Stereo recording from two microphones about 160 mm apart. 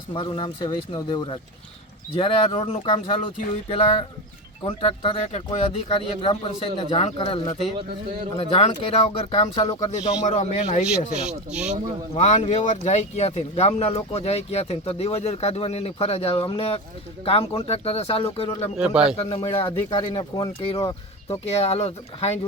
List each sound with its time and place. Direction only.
0.1 s a man's voice: 35° left (ahead or behind)
11.2 s speech: 5° right (ahead or behind)
12.1 s speech: 45° left (ahead or behind)
18.8 s speech: 5° right (ahead or behind)
19.1 s speech: 40° left (ahead or behind)
20.6 s speech: 35° left (ahead or behind)